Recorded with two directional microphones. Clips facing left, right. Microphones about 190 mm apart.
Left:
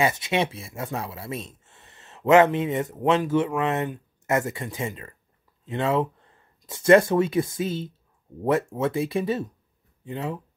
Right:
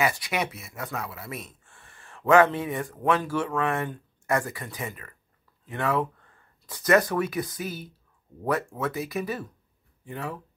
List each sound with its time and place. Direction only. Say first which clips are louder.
0.0 s speech: left 3 dB; 25° left (ahead or behind)